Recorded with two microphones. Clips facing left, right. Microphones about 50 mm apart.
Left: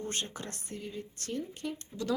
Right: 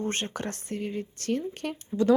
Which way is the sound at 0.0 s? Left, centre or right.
Right.